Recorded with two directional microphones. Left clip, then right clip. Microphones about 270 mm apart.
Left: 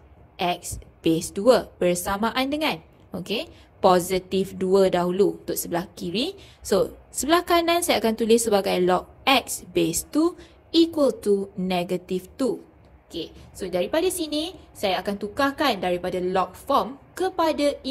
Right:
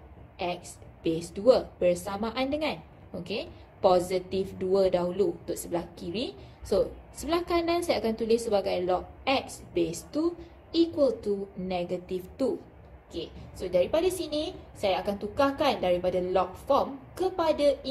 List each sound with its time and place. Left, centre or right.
0.4 s a woman's voice: left